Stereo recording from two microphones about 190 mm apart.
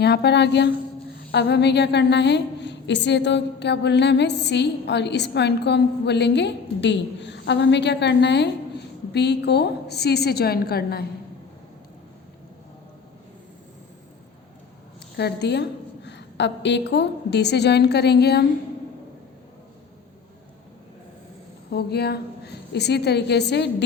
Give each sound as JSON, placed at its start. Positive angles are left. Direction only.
{"t": 0.0, "sound": "a woman's voice", "side_deg": 60}
{"t": 15.1, "sound": "a woman's voice", "side_deg": 60}
{"t": 21.7, "sound": "a woman's voice", "side_deg": 60}